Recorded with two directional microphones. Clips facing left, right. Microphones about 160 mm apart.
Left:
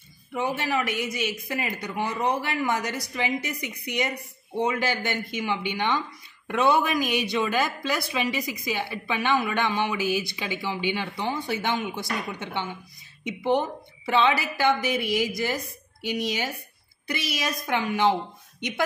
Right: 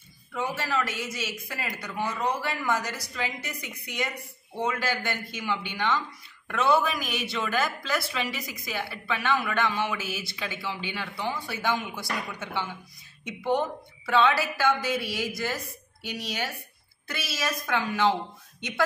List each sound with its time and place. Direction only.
0.3 s a man's voice: 20° left (ahead or behind)